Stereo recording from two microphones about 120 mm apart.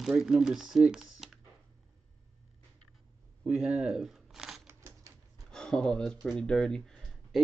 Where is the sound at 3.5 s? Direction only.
5° right (ahead or behind).